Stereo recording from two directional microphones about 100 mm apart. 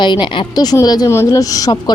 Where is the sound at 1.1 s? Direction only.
30° left (ahead or behind).